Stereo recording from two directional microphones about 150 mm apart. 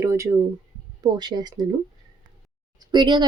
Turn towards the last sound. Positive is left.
turn(degrees=-30)  # may be behind; listen again after turning